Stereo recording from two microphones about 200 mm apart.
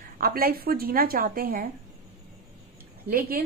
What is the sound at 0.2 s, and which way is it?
A woman's voice, 50° right (ahead or behind).